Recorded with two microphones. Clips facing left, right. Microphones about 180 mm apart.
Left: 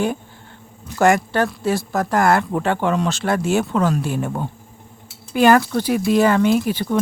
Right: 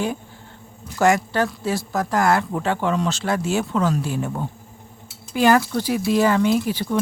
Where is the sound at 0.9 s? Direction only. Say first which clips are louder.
Left 2 dB; 55° left (ahead or behind).